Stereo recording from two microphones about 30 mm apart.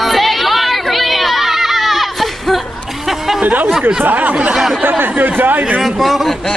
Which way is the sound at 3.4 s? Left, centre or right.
Right.